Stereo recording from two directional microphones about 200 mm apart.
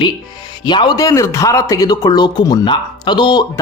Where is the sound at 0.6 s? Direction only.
20° left (ahead or behind).